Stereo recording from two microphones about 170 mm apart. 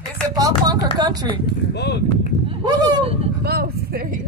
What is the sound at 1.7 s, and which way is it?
Speech, 80° left.